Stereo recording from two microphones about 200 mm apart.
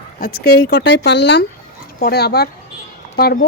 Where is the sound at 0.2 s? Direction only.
50° left (ahead or behind).